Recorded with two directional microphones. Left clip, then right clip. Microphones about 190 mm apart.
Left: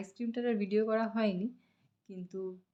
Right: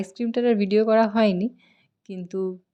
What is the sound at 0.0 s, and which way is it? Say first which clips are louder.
Speech: right 12 dB; 50° right (ahead or behind).